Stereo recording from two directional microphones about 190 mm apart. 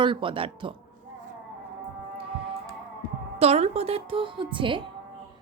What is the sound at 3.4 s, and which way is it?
A woman's voice, 35° right (ahead or behind).